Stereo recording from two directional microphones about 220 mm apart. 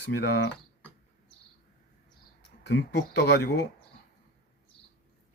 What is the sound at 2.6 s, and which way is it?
Speech, 55° left (ahead or behind).